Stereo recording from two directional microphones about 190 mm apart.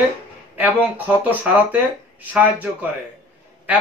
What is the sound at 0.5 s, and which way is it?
Speech, 10° right (ahead or behind).